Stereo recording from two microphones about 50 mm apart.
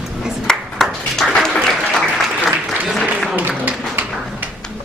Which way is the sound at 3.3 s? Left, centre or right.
Right.